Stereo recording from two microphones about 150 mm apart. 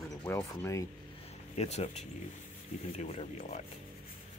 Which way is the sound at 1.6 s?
45° left (ahead or behind).